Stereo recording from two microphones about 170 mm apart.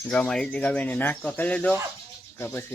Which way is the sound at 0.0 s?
5° left (ahead or behind).